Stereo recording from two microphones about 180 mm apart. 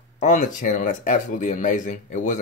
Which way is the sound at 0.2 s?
45° left (ahead or behind).